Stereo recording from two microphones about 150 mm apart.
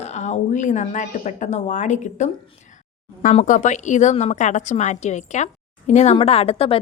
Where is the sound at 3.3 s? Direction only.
55° left (ahead or behind).